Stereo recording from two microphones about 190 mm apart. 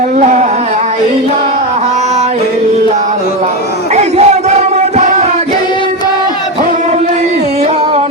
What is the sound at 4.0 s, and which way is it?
Crowd, 35° right (ahead or behind).